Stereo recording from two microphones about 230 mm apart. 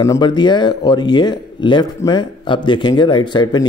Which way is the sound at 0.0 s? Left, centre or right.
Centre.